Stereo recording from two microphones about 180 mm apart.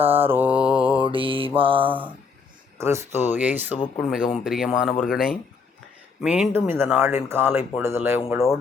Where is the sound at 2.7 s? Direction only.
15° right (ahead or behind).